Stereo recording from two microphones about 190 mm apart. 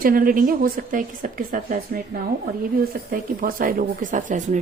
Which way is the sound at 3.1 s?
50° right (ahead or behind).